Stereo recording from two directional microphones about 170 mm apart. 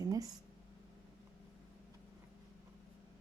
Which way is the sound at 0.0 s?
20° right (ahead or behind).